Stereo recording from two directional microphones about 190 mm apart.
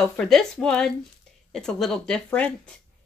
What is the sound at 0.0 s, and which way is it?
Speech, centre (ahead or behind).